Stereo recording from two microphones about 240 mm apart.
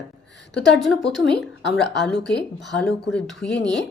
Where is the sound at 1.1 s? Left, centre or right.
Centre.